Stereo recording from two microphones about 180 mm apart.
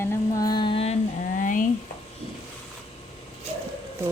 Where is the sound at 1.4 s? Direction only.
45° left (ahead or behind).